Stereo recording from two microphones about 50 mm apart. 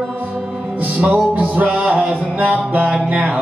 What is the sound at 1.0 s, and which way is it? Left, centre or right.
Music, right.